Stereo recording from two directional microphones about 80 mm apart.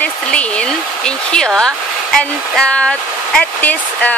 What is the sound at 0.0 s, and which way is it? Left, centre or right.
Speech, centre.